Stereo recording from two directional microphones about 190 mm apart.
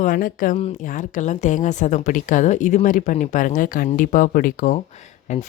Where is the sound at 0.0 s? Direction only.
45° left (ahead or behind).